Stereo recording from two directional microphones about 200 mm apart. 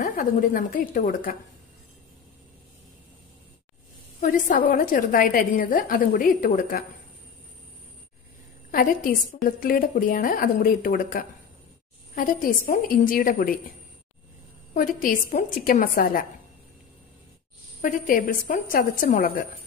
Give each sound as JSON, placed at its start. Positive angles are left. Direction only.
{"t": 0.0, "sound": "a woman's voice", "side_deg": 45}
{"t": 4.2, "sound": "a woman's voice", "side_deg": 40}
{"t": 8.7, "sound": "a woman's voice", "side_deg": 45}
{"t": 17.8, "sound": "a woman's voice", "side_deg": 40}